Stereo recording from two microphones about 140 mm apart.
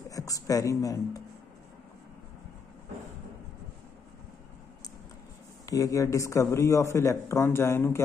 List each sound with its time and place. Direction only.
0.1 s speech: 25° left (ahead or behind)
5.7 s speech: 25° left (ahead or behind)